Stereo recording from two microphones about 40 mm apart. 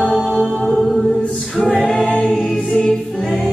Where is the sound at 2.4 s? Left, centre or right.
Left.